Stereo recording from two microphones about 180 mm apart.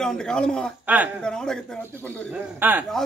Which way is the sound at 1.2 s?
5° left (ahead or behind).